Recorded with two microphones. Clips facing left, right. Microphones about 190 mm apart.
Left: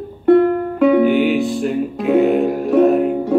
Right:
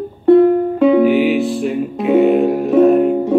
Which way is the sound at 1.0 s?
Centre (ahead or behind).